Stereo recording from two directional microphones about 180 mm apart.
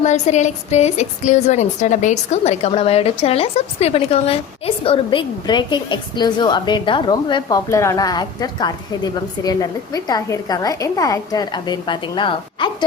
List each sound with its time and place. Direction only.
0.0 s a woman's voice: 40° left (ahead or behind)